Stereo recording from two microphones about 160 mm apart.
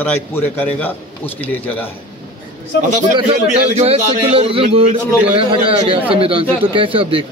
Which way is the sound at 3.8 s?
40° right (ahead or behind).